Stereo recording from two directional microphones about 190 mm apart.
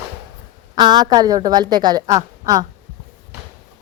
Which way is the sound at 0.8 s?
20° right (ahead or behind).